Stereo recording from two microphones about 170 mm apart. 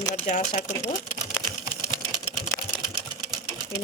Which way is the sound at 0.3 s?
45° left (ahead or behind).